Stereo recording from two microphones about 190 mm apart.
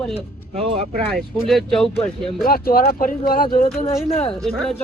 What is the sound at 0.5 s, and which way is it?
Speech, 30° right (ahead or behind).